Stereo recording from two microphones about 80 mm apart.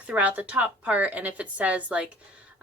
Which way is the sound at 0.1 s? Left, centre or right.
Centre.